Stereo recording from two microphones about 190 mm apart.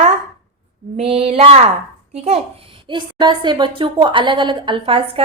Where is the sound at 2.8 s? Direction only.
25° right (ahead or behind).